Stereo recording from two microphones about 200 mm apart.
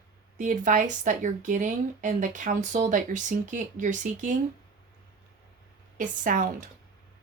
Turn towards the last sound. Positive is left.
turn(degrees=-40)  # may be behind; listen again after turning